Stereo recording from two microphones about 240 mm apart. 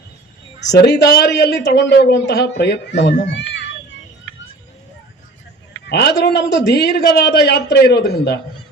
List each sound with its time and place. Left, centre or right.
0.7 s a man's voice: left
5.9 s a man's voice: left